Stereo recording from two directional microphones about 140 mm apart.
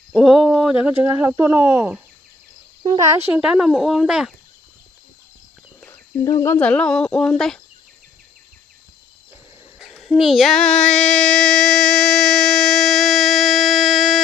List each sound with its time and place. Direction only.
0.1 s speech: centre (ahead or behind); by 3.2 s 25° right (ahead or behind)
3.2 s speech: 10° right (ahead or behind)
5.9 s speech: 25° left (ahead or behind); by 7.6 s 5° left (ahead or behind)
9.8 s a sound: centre (ahead or behind)